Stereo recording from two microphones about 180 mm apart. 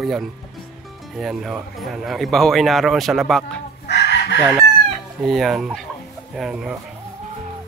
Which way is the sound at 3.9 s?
70° left (ahead or behind).